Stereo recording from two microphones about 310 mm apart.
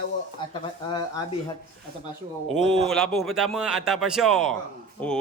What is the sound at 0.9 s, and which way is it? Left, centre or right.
Speech, centre.